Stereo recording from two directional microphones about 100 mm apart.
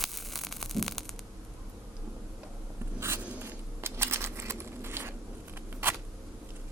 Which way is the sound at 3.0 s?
25° right (ahead or behind).